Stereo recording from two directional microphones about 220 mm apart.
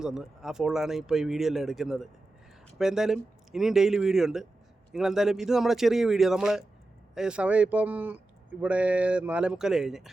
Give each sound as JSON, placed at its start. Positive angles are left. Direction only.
{"t": 0.0, "sound": "speech", "side_deg": 0}